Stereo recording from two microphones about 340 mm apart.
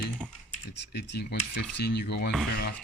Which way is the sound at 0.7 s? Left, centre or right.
Left.